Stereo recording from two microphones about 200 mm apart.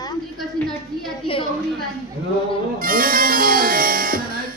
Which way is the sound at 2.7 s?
45° right (ahead or behind).